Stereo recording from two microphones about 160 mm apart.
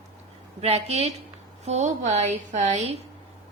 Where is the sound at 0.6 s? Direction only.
40° right (ahead or behind).